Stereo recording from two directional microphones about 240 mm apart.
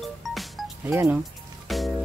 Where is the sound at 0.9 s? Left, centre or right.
Centre.